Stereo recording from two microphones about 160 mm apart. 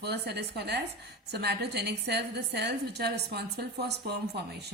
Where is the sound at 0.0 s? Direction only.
90° right.